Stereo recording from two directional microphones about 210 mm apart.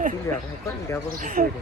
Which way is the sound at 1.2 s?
40° right (ahead or behind).